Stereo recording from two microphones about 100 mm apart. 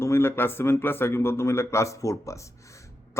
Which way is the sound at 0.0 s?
25° left (ahead or behind).